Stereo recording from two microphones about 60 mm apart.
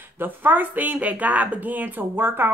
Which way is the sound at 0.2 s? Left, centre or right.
Right.